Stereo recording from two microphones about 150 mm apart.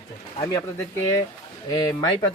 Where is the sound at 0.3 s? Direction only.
25° left (ahead or behind).